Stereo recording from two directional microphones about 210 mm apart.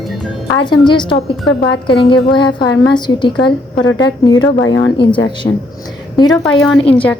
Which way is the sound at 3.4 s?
60° left (ahead or behind).